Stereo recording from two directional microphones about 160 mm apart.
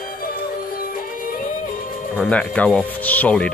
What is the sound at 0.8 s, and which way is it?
Music, 60° left (ahead or behind).